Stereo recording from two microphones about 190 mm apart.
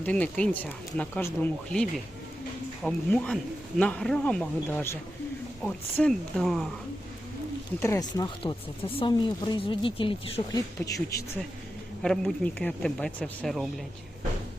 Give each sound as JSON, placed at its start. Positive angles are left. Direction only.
{"t": 0.0, "sound": "speech", "side_deg": 5}
{"t": 7.8, "sound": "speech", "side_deg": 15}
{"t": 12.0, "sound": "speech", "side_deg": 5}